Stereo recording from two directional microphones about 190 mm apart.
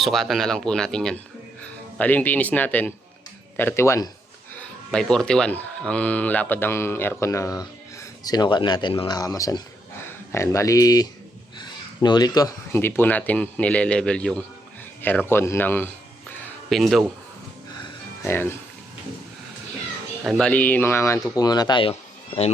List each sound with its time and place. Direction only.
0.0 s speech: centre (ahead or behind); by 4.1 s 15° left (ahead or behind)
4.5 s speech: 5° left (ahead or behind)
17.8 s music: 15° left (ahead or behind)
20.2 s speech: centre (ahead or behind); by 21.9 s 25° left (ahead or behind)